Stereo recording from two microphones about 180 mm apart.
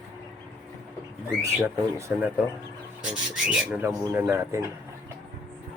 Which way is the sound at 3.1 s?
5° right (ahead or behind).